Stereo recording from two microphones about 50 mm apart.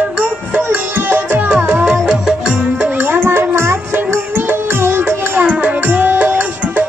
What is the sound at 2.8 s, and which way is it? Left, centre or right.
Music, right.